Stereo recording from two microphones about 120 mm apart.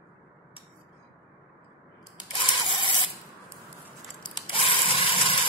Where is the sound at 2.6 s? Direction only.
40° left (ahead or behind).